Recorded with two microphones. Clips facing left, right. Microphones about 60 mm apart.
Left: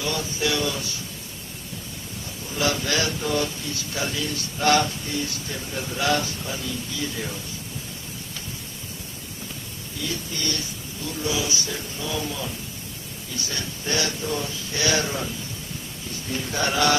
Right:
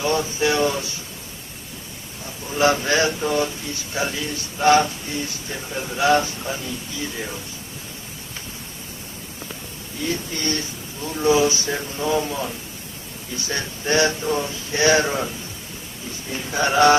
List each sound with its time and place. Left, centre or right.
0.0 s speech: right
2.5 s speech: right
10.0 s speech: right
16.3 s speech: right